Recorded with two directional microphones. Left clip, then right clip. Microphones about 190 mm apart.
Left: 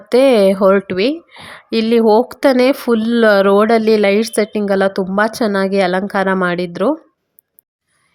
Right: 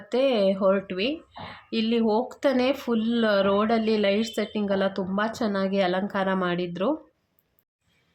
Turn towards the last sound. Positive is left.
turn(degrees=45)  # may be behind; listen again after turning